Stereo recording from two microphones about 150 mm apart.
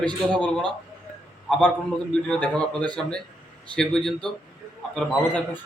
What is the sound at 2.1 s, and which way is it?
A man's voice, 5° left (ahead or behind).